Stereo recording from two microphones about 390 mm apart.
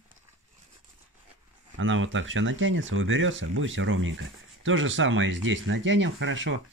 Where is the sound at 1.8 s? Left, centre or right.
Right.